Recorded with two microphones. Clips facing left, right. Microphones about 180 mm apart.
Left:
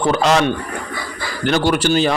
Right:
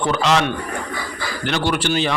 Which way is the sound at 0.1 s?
45° left (ahead or behind).